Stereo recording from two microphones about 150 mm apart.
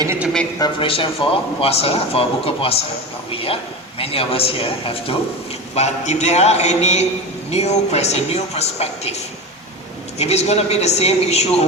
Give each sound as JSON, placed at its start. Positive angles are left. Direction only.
{"t": 0.6, "sound": "speech", "side_deg": 35}
{"t": 10.2, "sound": "speech", "side_deg": 45}